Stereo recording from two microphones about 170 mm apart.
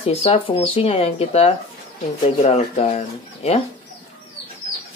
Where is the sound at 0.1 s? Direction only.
35° left (ahead or behind).